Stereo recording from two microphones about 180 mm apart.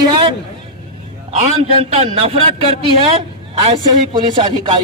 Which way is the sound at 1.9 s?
35° right (ahead or behind).